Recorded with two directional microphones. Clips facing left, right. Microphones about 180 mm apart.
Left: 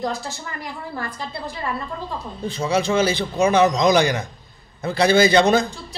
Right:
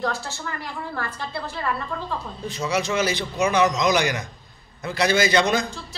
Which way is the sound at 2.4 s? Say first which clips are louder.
Left 5 dB; 30° left (ahead or behind).